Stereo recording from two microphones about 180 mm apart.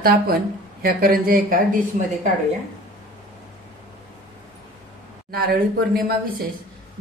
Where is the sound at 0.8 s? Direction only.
55° right (ahead or behind).